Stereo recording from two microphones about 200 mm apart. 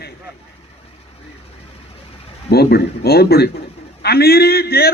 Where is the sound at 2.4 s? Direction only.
50° left (ahead or behind).